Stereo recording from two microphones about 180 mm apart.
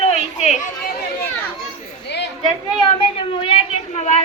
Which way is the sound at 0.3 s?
40° left (ahead or behind).